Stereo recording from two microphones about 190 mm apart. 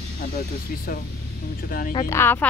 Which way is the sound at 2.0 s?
10° left (ahead or behind).